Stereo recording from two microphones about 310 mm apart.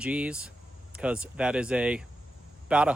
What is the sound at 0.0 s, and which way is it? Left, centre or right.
Speech, centre.